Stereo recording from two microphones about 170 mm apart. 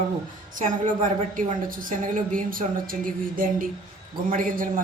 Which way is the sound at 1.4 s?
50° right (ahead or behind).